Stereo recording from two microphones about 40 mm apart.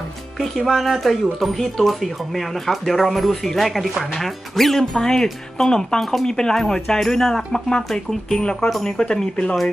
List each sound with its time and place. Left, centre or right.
0.4 s speech: centre
6.2 s speech: centre
8.6 s speech: centre
8.9 s speech: left